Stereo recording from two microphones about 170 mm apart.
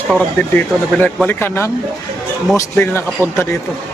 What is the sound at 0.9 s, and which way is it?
Speech, 10° left (ahead or behind).